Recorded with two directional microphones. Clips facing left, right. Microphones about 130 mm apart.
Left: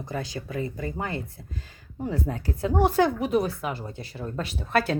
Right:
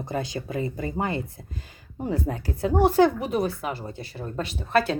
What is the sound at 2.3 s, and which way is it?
Speech, 35° right (ahead or behind).